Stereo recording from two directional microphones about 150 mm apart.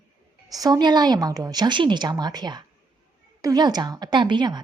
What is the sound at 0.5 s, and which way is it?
A woman's voice, 25° right (ahead or behind).